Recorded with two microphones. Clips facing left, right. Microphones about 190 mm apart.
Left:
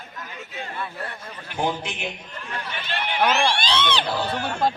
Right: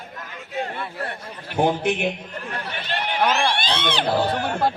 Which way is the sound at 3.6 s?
55° right (ahead or behind).